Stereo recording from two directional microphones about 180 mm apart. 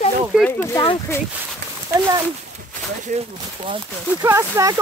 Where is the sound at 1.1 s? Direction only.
15° left (ahead or behind).